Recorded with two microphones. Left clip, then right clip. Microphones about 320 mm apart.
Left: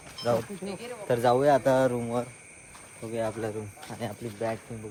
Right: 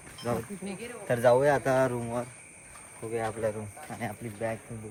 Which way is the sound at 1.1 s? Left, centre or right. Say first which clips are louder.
Left 1 dB; centre.